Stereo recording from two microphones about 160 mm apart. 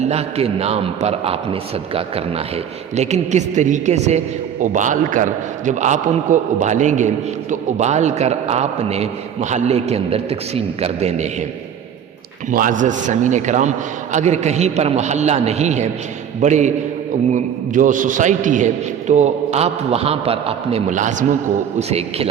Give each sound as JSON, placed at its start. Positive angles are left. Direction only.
{"t": 0.0, "sound": "a man's voice", "side_deg": -40}
{"t": 12.5, "sound": "a man's voice", "side_deg": -55}